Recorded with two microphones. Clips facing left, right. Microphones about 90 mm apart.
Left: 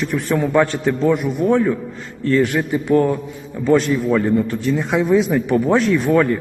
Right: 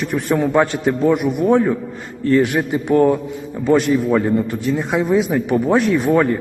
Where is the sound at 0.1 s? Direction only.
60° right (ahead or behind).